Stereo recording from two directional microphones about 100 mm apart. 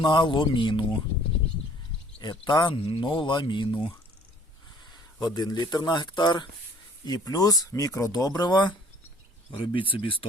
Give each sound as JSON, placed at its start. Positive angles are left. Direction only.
{"t": 0.0, "sound": "speech", "side_deg": 45}
{"t": 2.5, "sound": "speech", "side_deg": 50}
{"t": 2.8, "sound": "speech", "side_deg": 60}
{"t": 4.9, "sound": "speech", "side_deg": 40}
{"t": 9.5, "sound": "speech", "side_deg": 60}